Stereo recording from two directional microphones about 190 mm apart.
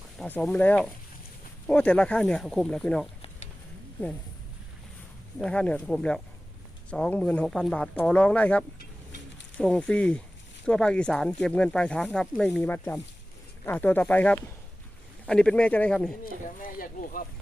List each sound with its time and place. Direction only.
0.2 s speech: 5° left (ahead or behind)
5.4 s speech: 5° left (ahead or behind)
16.2 s speech: 50° left (ahead or behind)